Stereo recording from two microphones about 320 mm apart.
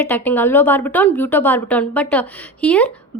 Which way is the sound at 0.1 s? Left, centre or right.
Centre.